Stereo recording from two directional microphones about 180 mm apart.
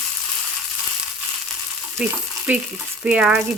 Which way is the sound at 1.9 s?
5° right (ahead or behind).